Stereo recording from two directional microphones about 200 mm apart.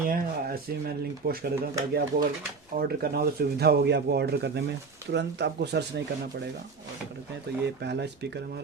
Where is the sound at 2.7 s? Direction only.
50° right (ahead or behind).